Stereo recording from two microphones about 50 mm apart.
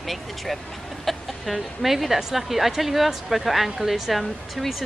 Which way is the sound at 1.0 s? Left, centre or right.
Centre.